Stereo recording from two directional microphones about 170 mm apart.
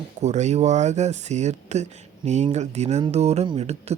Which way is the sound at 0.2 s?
40° right (ahead or behind).